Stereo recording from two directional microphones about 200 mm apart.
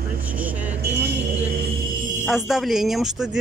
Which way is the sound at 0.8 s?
55° right (ahead or behind).